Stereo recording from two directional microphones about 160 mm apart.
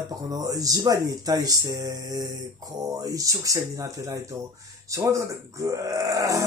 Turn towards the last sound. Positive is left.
turn(degrees=-20)  # may be behind; listen again after turning